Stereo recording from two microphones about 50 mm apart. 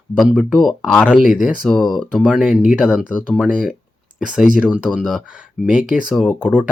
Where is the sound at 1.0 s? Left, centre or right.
Centre.